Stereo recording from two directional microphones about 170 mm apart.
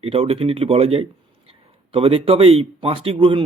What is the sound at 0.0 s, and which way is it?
Speech, 35° right (ahead or behind).